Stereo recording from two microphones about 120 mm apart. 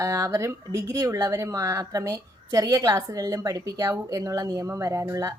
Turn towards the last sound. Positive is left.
turn(degrees=-25)  # may be behind; listen again after turning